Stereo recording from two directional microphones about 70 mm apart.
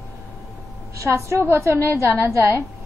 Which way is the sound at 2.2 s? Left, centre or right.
Right.